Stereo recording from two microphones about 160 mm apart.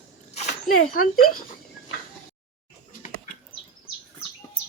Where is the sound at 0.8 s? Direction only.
60° left (ahead or behind).